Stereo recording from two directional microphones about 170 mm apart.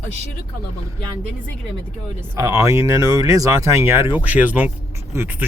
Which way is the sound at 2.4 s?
15° right (ahead or behind).